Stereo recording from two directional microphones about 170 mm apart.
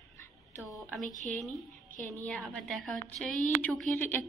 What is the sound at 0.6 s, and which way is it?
A woman's voice, centre (ahead or behind).